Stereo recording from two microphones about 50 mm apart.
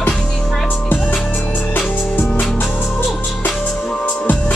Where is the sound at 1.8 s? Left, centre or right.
Centre.